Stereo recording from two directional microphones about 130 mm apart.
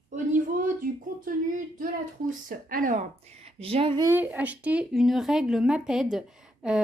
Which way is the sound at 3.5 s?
50° right (ahead or behind).